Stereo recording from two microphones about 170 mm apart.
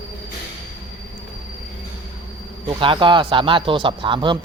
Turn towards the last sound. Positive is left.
turn(degrees=-30)  # may be behind; listen again after turning